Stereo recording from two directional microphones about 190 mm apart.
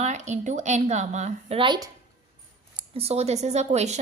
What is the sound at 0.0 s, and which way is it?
A woman's voice, 40° right (ahead or behind).